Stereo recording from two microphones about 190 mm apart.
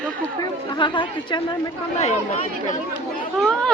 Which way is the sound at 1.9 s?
35° left (ahead or behind).